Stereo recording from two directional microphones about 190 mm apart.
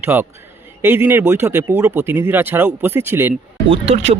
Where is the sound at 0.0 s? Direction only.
10° right (ahead or behind).